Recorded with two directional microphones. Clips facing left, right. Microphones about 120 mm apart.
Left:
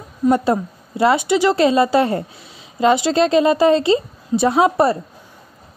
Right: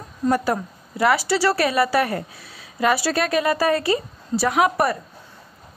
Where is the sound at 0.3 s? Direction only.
25° left (ahead or behind).